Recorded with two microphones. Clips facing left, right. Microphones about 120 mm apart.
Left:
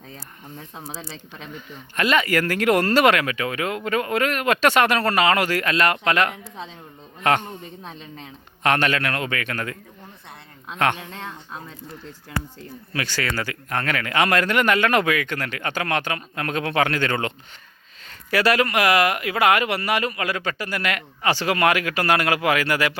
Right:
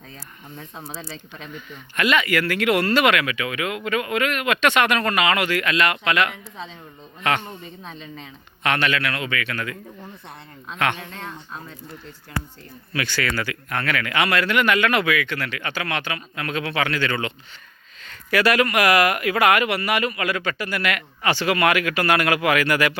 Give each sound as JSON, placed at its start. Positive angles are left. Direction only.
{"t": 1.5, "sound": "a man's voice", "side_deg": 35}
{"t": 8.6, "sound": "a man's voice", "side_deg": 40}
{"t": 10.9, "sound": "speech", "side_deg": 10}
{"t": 12.9, "sound": "speech", "side_deg": 35}
{"t": 18.0, "sound": "speech", "side_deg": 35}